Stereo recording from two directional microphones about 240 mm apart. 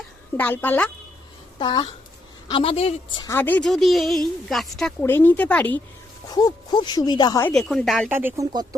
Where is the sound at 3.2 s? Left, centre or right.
Centre.